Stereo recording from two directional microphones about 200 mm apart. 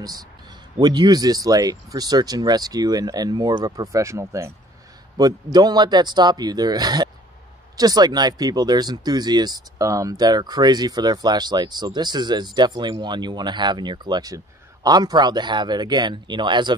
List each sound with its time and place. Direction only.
0.7 s speech: 20° right (ahead or behind)